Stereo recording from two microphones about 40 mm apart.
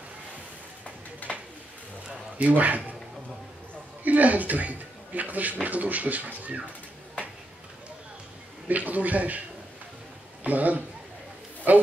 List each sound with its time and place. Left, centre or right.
2.3 s a man's voice: right
4.0 s speech: right
8.6 s a man's voice: right
10.4 s a man's voice: right